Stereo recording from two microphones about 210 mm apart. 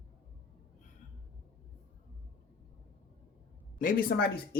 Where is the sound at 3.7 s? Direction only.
45° left (ahead or behind).